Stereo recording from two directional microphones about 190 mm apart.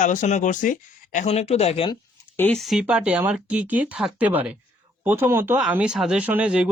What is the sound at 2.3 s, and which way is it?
Speech, 10° left (ahead or behind).